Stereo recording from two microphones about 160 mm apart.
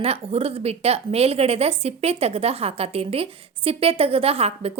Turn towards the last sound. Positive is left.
turn(degrees=-40)  # may be behind; listen again after turning